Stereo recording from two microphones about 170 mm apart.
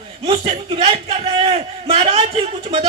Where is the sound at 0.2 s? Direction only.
30° right (ahead or behind).